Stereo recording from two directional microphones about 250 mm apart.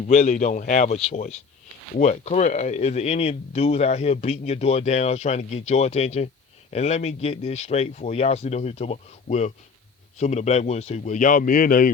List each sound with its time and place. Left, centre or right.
0.1 s speech: left